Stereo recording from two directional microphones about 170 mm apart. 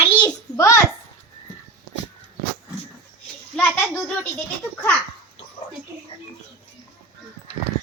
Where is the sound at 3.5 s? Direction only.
10° left (ahead or behind).